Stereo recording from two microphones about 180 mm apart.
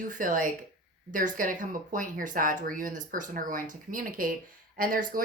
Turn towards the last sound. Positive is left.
turn(degrees=-50)  # may be behind; listen again after turning